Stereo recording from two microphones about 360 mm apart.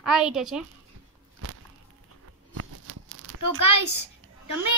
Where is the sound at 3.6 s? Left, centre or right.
Left.